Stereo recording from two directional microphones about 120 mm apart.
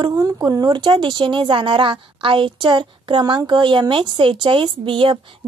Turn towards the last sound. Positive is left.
turn(degrees=-45)  # may be behind; listen again after turning